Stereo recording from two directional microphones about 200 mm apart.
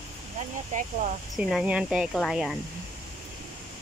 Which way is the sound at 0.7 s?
40° right (ahead or behind).